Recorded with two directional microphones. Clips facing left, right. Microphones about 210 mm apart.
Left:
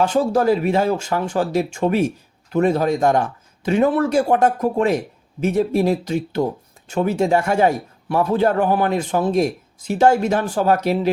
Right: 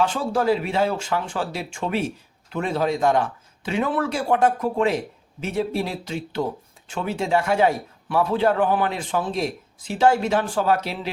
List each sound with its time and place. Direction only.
0.0 s a man's voice: 45° left (ahead or behind)